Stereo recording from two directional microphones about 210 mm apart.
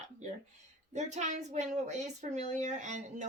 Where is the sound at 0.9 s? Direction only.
35° right (ahead or behind).